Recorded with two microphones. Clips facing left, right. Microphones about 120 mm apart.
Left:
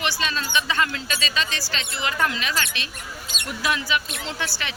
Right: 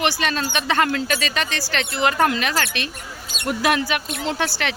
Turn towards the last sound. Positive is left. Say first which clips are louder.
# right 7 dB
turn(degrees=-65)  # may be behind; listen again after turning